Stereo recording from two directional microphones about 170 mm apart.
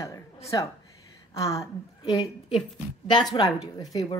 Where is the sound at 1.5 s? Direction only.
35° left (ahead or behind).